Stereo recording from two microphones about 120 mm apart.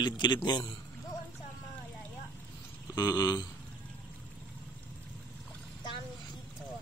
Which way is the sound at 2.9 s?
30° left (ahead or behind).